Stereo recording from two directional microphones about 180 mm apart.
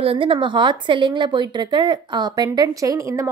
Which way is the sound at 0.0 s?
30° right (ahead or behind).